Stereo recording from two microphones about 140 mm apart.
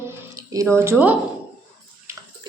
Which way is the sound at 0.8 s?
15° right (ahead or behind).